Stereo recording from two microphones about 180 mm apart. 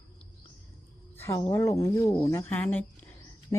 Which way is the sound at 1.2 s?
15° left (ahead or behind).